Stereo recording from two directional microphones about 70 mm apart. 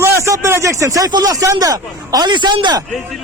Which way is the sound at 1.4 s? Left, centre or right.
Right.